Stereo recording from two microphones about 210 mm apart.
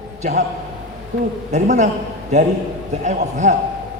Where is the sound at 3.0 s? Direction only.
35° right (ahead or behind).